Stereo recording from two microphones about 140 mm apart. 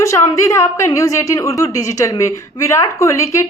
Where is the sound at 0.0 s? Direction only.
25° left (ahead or behind).